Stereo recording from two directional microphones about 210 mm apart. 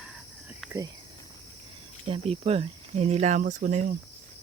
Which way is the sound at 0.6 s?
Centre (ahead or behind).